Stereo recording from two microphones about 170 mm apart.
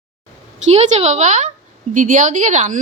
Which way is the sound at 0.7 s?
40° right (ahead or behind).